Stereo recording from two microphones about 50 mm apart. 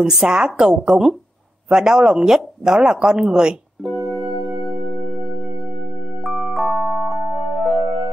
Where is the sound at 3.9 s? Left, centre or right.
Right.